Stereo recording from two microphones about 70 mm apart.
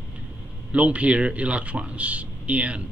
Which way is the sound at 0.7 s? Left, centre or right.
Centre.